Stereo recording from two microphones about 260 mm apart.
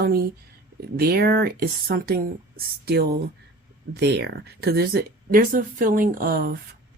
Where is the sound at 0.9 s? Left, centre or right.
Right.